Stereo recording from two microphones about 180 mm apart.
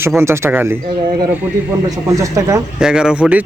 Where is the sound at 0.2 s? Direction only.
15° right (ahead or behind).